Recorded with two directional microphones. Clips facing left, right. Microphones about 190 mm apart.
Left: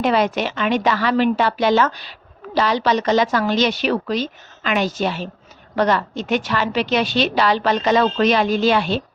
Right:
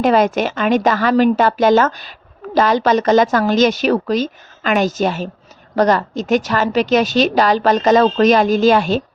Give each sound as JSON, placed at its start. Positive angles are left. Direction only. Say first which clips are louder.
{"t": 0.0, "sound": "a woman's voice", "louder": "right 4 dB", "side_deg": -45}